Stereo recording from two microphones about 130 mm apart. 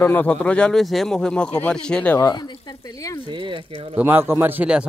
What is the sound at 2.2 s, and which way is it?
Speech, 35° left (ahead or behind).